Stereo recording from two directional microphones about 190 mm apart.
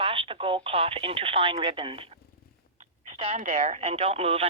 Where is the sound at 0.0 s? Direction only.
30° right (ahead or behind).